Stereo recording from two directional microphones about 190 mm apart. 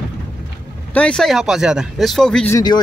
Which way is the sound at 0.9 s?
5° left (ahead or behind).